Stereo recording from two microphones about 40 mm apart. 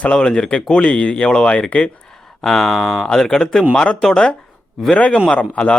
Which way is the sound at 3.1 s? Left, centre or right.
Centre.